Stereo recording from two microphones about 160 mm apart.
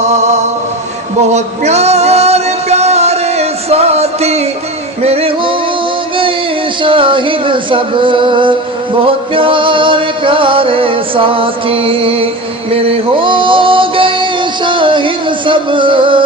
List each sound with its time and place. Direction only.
0.0 s chant: 45° right (ahead or behind)
1.3 s music: 45° right (ahead or behind)
6.8 s a sound: 35° right (ahead or behind)
9.0 s music: 35° right (ahead or behind)